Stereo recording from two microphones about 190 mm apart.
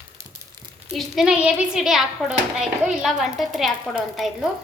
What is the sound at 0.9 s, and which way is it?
Speech, centre (ahead or behind).